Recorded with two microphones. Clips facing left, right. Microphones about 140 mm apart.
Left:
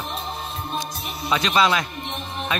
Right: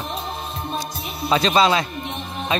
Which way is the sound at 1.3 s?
30° right (ahead or behind).